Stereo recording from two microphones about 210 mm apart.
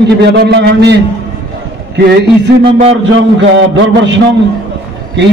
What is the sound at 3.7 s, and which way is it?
Speech, 60° right (ahead or behind).